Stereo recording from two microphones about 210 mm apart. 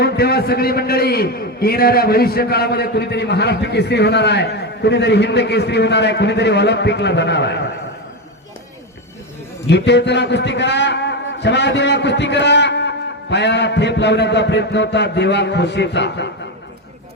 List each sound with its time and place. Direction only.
0.0 s a man's voice: 50° left (ahead or behind)
9.6 s a man's voice: 55° left (ahead or behind)